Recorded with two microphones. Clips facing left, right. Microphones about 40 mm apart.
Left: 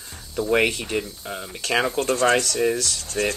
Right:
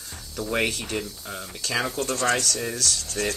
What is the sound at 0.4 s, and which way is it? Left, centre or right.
Speech, centre.